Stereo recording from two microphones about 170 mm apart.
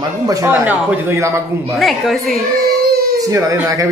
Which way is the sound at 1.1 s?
15° right (ahead or behind).